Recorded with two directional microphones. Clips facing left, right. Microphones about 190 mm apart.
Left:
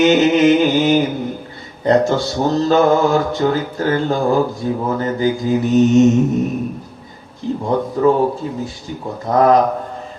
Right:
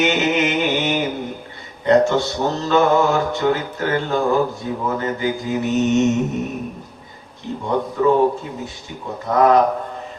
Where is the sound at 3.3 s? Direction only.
35° left (ahead or behind).